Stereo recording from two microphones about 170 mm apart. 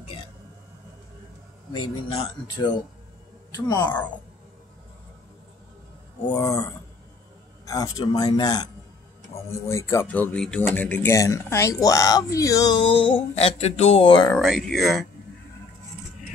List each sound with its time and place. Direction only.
3.5 s speech: 20° left (ahead or behind)
6.3 s speech: 20° left (ahead or behind)
7.6 s speech: 20° left (ahead or behind)
14.4 s speech: centre (ahead or behind)